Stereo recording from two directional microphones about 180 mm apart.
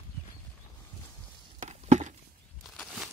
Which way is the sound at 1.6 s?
40° right (ahead or behind).